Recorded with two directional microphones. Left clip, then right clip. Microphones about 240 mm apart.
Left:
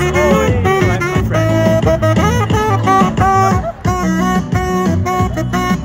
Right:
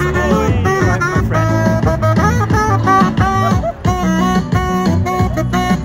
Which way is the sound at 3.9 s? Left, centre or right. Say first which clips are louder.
Left 1 dB; centre.